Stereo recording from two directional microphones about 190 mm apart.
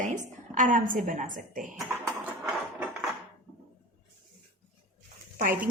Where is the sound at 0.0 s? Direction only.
40° right (ahead or behind).